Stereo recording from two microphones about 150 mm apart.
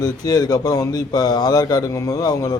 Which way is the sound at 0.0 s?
25° left (ahead or behind).